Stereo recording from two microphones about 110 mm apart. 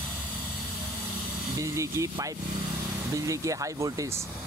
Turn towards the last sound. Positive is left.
turn(degrees=-30)  # may be behind; listen again after turning